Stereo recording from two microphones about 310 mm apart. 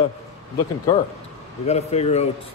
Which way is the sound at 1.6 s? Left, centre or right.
Left.